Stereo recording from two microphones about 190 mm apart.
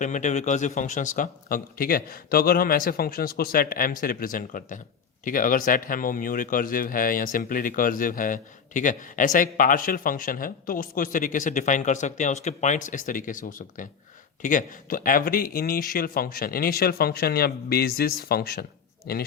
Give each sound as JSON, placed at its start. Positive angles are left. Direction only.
{"t": 0.0, "sound": "a man's voice", "side_deg": 40}